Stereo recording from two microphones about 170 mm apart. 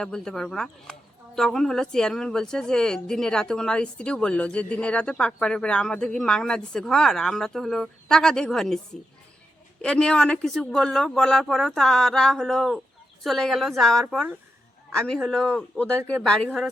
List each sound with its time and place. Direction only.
0.0 s a woman's voice: 5° left (ahead or behind)